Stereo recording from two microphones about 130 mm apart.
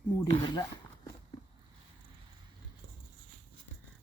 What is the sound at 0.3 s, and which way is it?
Speech, 35° left (ahead or behind).